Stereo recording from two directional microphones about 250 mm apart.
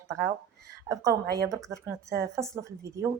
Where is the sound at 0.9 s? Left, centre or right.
Centre.